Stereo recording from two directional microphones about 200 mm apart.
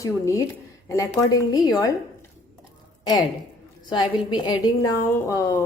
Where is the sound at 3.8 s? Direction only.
20° left (ahead or behind).